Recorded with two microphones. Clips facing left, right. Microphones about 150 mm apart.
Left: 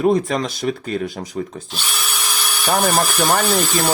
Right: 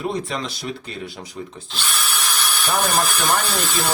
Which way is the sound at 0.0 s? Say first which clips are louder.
Left 8 dB; 45° left (ahead or behind).